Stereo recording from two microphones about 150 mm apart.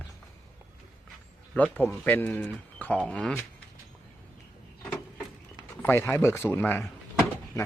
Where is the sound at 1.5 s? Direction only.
10° left (ahead or behind).